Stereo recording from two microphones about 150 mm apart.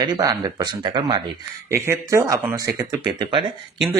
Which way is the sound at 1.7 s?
20° right (ahead or behind).